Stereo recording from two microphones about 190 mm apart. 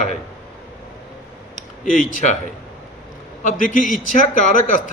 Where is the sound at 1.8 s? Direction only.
45° left (ahead or behind).